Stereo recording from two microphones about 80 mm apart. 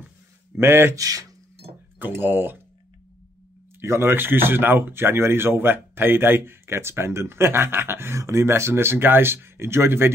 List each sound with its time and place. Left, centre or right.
0.6 s speech: right
0.9 s speech: right
2.0 s speech: right
3.8 s speech: right